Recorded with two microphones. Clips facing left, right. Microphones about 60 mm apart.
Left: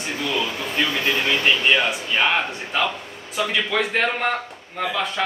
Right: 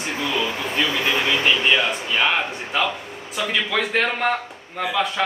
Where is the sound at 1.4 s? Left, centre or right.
Centre.